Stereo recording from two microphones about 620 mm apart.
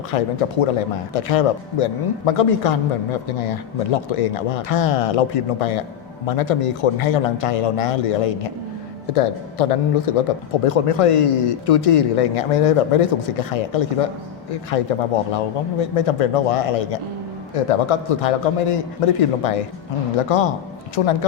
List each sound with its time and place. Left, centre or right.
0.1 s a man's voice: left